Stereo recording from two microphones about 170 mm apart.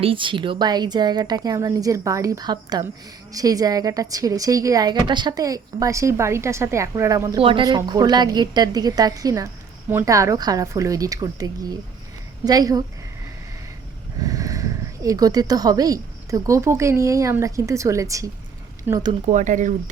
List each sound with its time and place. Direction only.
0.0 s a woman's voice: 30° right (ahead or behind)
14.2 s a woman's voice: 20° right (ahead or behind)
19.3 s speech: 45° right (ahead or behind)